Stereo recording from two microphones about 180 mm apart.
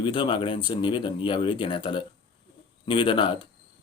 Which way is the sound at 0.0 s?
25° left (ahead or behind).